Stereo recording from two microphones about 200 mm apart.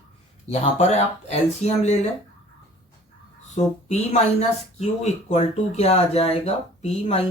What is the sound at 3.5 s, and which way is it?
Speech, 35° left (ahead or behind).